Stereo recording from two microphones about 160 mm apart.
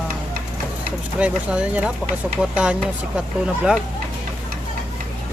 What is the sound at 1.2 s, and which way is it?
Speech, 5° right (ahead or behind).